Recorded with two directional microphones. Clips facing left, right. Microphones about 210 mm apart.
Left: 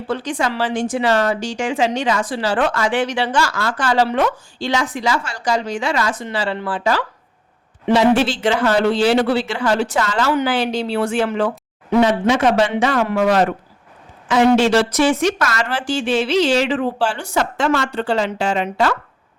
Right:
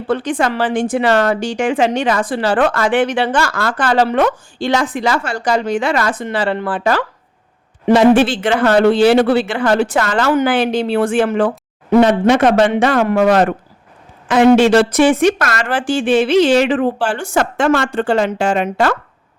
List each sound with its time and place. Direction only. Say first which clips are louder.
0.1 s a woman's voice: right 5 dB; 55° right (ahead or behind)